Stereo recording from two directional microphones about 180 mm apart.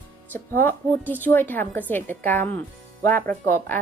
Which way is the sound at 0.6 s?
10° left (ahead or behind).